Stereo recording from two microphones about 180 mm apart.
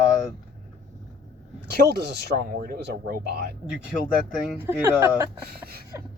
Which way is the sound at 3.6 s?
5° right (ahead or behind).